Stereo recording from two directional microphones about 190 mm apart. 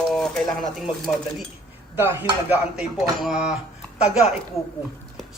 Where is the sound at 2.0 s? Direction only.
10° right (ahead or behind).